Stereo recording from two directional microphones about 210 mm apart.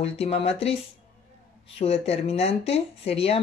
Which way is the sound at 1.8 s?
30° left (ahead or behind).